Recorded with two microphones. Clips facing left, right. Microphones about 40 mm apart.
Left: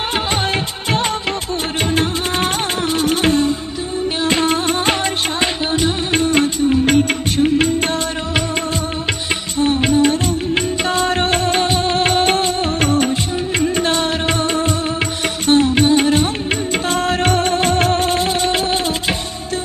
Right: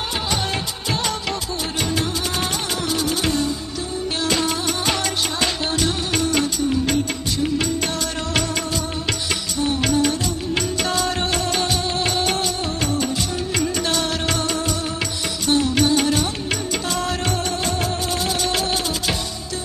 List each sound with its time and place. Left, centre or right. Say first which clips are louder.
2.0 s music: left 5 dB; left
4.2 s music of bollywood: left 5 dB; left
5.4 s music of bollywood: left 4 dB; left
9.6 s music: left 6 dB; left
13.6 s music of bollywood: left 5 dB; left
15.4 s music: left 5 dB; left